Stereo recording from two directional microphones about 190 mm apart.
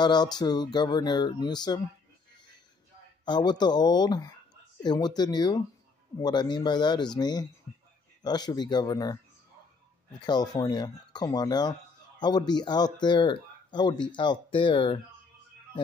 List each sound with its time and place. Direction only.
0.0 s speech: 20° left (ahead or behind)
3.3 s speech: 20° left (ahead or behind)
10.2 s speech: 20° left (ahead or behind)